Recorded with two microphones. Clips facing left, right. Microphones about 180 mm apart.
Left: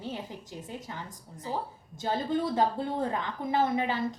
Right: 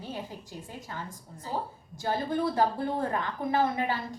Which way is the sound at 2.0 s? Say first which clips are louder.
Even; 20° left (ahead or behind).